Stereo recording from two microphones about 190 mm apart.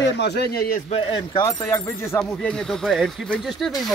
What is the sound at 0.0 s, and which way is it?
Speech, 60° left (ahead or behind).